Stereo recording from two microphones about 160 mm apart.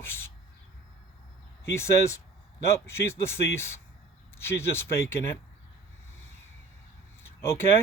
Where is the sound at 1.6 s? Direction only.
15° left (ahead or behind).